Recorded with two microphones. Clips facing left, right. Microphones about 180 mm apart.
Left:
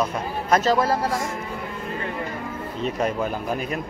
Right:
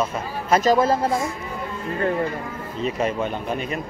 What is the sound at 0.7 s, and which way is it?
Speech, 20° right (ahead or behind).